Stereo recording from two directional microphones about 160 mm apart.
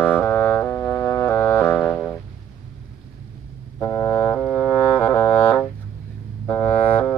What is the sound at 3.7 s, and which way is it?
Music, 20° left (ahead or behind).